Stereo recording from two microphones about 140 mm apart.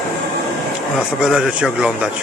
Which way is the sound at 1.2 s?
5° right (ahead or behind).